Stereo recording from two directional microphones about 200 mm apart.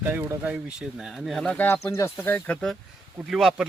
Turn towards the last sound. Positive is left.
turn(degrees=0)  # may be behind; listen again after turning